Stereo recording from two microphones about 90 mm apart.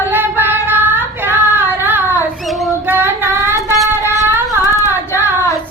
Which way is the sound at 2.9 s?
25° right (ahead or behind).